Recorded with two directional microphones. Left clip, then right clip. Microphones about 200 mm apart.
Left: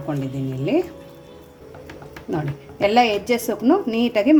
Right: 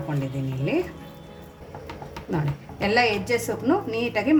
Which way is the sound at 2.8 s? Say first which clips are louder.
Left 5 dB; 35° left (ahead or behind).